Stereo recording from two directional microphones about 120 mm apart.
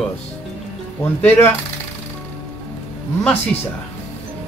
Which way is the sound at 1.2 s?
20° left (ahead or behind).